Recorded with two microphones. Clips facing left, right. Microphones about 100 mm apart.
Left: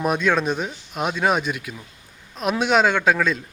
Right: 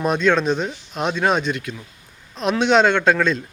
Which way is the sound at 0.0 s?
10° left (ahead or behind).